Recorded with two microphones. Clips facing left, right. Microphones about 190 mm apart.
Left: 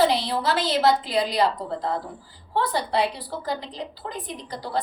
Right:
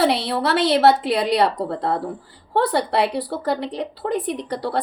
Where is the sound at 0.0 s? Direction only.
65° right (ahead or behind).